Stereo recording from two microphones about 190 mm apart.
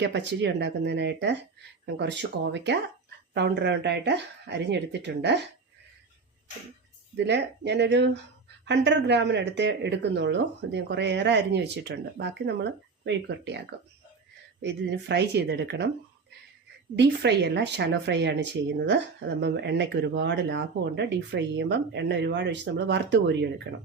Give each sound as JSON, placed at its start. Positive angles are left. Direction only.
{"t": 0.0, "sound": "speech", "side_deg": -65}
{"t": 7.2, "sound": "speech", "side_deg": -65}
{"t": 14.6, "sound": "speech", "side_deg": -65}
{"t": 16.9, "sound": "speech", "side_deg": -60}